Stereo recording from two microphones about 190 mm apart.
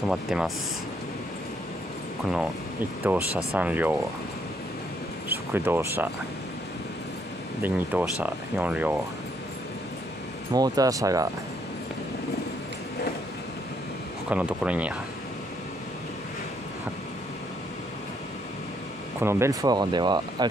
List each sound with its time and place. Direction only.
0.1 s speech: centre (ahead or behind)
3.1 s speech: 10° right (ahead or behind)
5.5 s speech: 10° right (ahead or behind)
7.6 s speech: 10° right (ahead or behind)
10.5 s speech: 20° right (ahead or behind)
14.3 s speech: 5° right (ahead or behind)
19.2 s speech: 15° right (ahead or behind)